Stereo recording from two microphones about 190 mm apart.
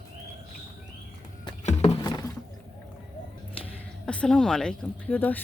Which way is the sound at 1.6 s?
35° left (ahead or behind).